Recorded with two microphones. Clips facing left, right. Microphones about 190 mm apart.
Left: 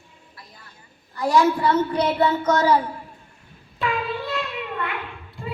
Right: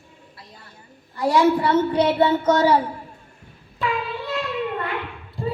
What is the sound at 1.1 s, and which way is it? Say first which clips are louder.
A woman's voice: right 1 dB; 25° right (ahead or behind).